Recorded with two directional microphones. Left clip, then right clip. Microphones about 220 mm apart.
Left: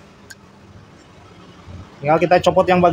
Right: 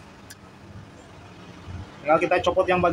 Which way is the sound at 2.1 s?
45° left (ahead or behind).